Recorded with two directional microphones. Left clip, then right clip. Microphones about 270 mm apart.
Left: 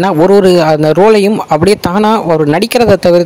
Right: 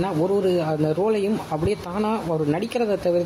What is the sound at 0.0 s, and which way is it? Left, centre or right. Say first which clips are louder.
A man's voice: left 15 dB; left.